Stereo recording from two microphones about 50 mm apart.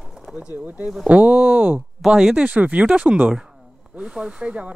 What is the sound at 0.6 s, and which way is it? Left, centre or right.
Speech, right.